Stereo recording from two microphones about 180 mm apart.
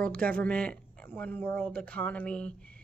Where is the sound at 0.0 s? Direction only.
5° left (ahead or behind).